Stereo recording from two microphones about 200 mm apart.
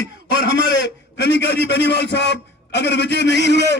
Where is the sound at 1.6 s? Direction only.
60° left (ahead or behind).